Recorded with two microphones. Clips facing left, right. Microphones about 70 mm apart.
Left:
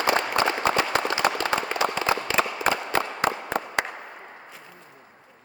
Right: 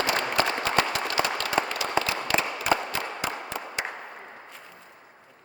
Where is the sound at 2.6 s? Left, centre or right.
Left.